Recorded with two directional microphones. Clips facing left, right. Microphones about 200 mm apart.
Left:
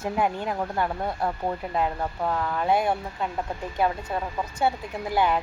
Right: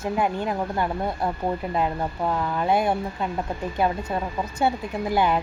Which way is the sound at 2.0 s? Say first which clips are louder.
Right 2 dB; 10° right (ahead or behind).